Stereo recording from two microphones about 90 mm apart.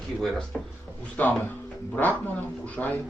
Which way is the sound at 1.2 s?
20° left (ahead or behind).